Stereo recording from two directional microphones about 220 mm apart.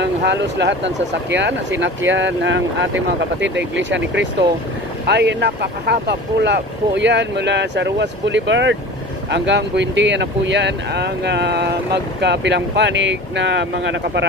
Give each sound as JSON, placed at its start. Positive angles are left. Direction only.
{"t": 0.0, "sound": "speech", "side_deg": -50}